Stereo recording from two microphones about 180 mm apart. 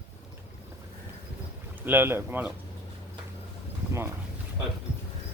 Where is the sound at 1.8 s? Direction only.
10° right (ahead or behind).